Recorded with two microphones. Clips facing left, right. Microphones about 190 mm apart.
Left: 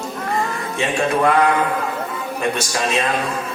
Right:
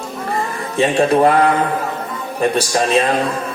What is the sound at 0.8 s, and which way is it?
Speech, 35° right (ahead or behind).